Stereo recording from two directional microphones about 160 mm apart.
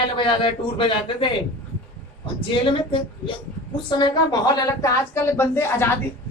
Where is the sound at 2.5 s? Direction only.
30° left (ahead or behind); by 5.9 s 15° left (ahead or behind).